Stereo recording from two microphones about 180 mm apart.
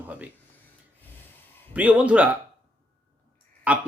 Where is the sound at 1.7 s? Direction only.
10° right (ahead or behind).